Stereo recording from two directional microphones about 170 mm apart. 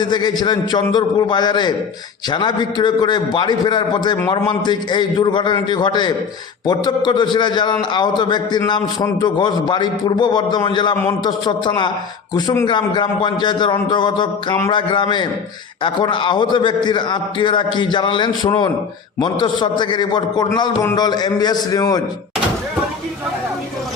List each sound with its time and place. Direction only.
0.0 s a man's voice: 25° left (ahead or behind)